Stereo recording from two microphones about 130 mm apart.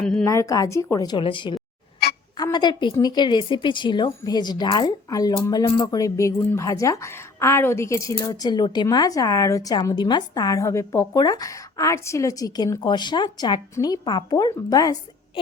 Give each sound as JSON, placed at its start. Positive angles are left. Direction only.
{"t": 0.0, "sound": "a sound", "side_deg": 5}
{"t": 0.3, "sound": "speech", "side_deg": 25}
{"t": 1.2, "sound": "a woman's voice", "side_deg": 40}